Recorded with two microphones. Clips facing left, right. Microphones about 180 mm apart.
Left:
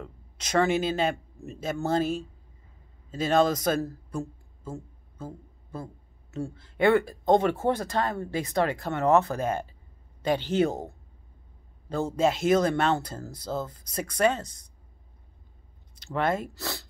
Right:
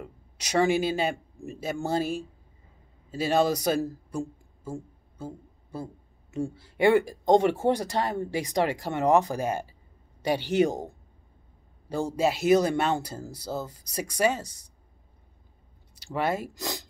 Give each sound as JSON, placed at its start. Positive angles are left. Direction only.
{"t": 0.0, "sound": "a man's voice", "side_deg": -10}
{"t": 12.2, "sound": "speech", "side_deg": -5}
{"t": 16.1, "sound": "speech", "side_deg": -5}